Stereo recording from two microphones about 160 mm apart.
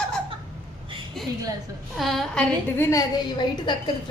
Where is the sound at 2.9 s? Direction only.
20° left (ahead or behind).